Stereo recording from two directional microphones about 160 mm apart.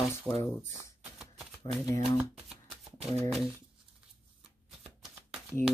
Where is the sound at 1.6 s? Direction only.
40° right (ahead or behind).